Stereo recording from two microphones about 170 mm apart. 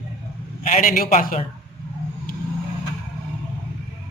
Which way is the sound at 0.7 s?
55° left (ahead or behind).